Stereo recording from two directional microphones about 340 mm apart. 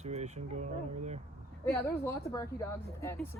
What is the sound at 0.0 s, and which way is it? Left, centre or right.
Speech, centre.